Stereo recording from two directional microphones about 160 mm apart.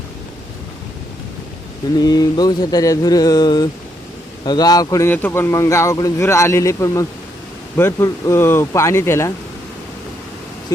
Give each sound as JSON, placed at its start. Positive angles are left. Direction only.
{"t": 2.0, "sound": "a man's voice", "side_deg": 25}